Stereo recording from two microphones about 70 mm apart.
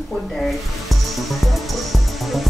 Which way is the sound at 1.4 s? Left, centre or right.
Centre.